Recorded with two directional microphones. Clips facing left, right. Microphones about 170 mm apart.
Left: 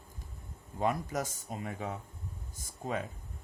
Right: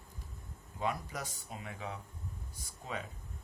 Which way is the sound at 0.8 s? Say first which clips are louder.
Left 5 dB; 45° left (ahead or behind).